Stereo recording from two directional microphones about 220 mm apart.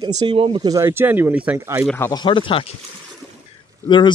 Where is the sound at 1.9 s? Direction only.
15° left (ahead or behind).